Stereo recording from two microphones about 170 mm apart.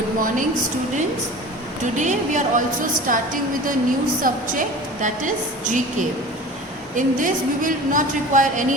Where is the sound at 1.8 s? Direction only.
45° right (ahead or behind).